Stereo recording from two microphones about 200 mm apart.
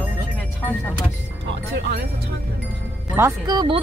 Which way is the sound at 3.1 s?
15° right (ahead or behind).